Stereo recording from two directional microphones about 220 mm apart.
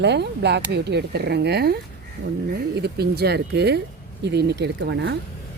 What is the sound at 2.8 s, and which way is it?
Speech, 45° right (ahead or behind).